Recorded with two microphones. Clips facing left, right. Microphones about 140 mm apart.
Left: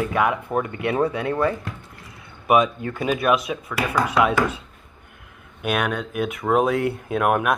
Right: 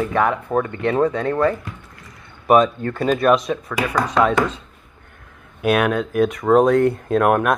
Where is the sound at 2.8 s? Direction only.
10° left (ahead or behind).